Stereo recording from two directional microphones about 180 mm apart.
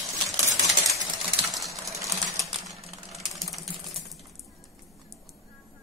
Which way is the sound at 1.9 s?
15° right (ahead or behind).